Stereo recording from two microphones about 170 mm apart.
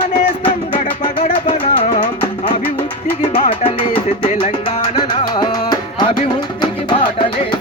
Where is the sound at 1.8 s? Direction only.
50° left (ahead or behind).